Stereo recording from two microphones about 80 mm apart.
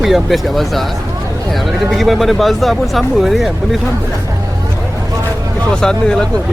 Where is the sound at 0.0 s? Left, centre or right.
Centre.